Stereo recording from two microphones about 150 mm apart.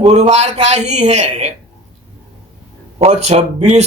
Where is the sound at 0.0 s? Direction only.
50° right (ahead or behind).